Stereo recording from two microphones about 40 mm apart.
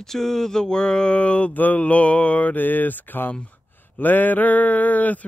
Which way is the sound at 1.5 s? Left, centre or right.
Left.